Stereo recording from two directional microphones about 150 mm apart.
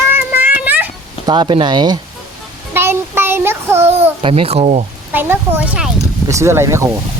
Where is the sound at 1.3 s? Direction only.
30° right (ahead or behind).